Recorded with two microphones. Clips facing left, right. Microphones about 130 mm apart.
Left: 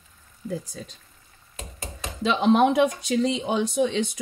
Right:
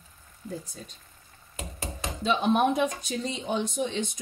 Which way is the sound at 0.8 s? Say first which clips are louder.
Left 5 dB; 90° left.